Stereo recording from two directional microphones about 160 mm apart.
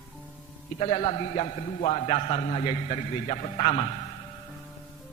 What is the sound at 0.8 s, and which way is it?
A man's voice, 40° left (ahead or behind).